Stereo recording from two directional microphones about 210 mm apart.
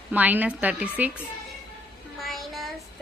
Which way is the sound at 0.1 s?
5° right (ahead or behind).